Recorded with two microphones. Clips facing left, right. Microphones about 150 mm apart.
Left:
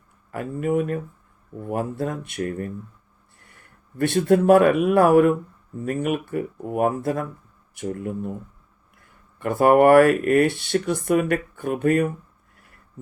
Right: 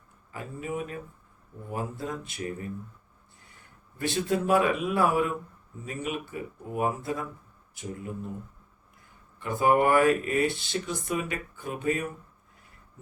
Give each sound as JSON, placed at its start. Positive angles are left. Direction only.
{"t": 0.3, "sound": "speech", "side_deg": 60}
{"t": 9.4, "sound": "speech", "side_deg": 60}
{"t": 12.5, "sound": "a sound", "side_deg": 60}